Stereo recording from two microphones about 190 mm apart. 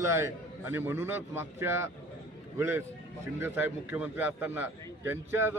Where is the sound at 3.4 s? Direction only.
10° right (ahead or behind).